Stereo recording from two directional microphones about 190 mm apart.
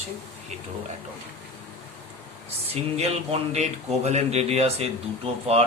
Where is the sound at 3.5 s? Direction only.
35° right (ahead or behind).